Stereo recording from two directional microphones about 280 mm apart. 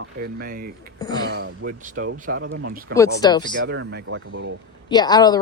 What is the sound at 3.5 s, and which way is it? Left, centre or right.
Speech, right.